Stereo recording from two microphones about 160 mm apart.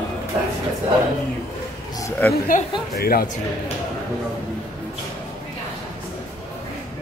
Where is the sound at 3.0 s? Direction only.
70° left (ahead or behind).